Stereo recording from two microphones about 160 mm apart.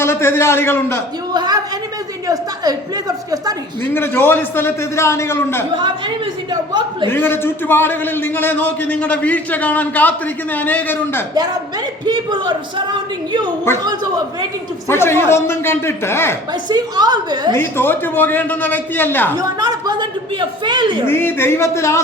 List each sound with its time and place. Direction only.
0.0 s a man's voice: 15° left (ahead or behind)
1.3 s a sound: 25° right (ahead or behind)
2.2 s a woman's voice: 20° right (ahead or behind)
3.9 s a man's voice: 15° left (ahead or behind)
6.5 s a woman's voice: 30° right (ahead or behind)
7.1 s a man's voice: 15° left (ahead or behind)
12.0 s a woman's voice: 30° right (ahead or behind)
14.8 s a man's voice: 15° left (ahead or behind)
16.6 s a woman's voice: 25° right (ahead or behind)
17.6 s a man's voice: 15° left (ahead or behind)
19.4 s a woman's voice: 25° right (ahead or behind)
21.1 s a man's voice: 15° left (ahead or behind)